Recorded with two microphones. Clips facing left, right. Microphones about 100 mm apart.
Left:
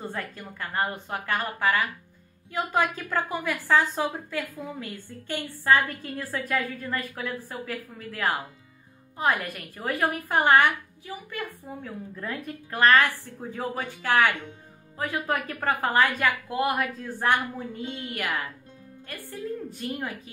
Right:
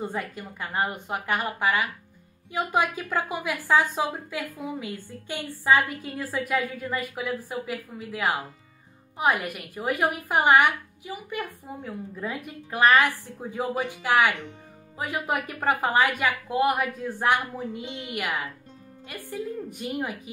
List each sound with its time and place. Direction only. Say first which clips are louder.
0.0 s a woman's voice: right 3 dB; 15° right (ahead or behind)
19.7 s a woman's voice: right 2 dB; 15° right (ahead or behind)